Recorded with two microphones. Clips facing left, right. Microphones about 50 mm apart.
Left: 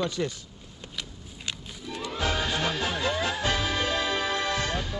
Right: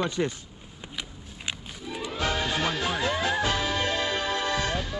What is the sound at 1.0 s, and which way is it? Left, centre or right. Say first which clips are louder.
Music: right 1 dB; centre.